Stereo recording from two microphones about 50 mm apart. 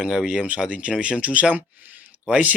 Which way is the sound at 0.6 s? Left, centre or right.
Right.